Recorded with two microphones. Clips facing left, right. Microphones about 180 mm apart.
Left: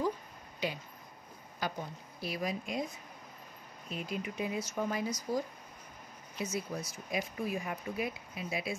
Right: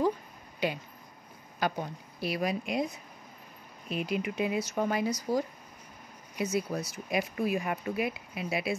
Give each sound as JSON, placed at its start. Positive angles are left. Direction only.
{"t": 0.6, "sound": "a sound", "side_deg": -55}
{"t": 1.6, "sound": "a woman's voice", "side_deg": -70}
{"t": 3.9, "sound": "speech", "side_deg": -75}
{"t": 6.4, "sound": "speech", "side_deg": -70}